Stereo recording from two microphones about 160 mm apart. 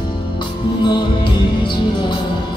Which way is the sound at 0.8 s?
30° left (ahead or behind).